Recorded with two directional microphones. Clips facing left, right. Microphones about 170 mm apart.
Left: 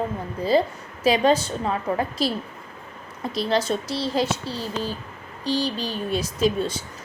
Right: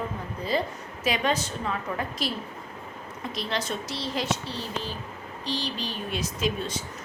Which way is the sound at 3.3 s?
35° left (ahead or behind).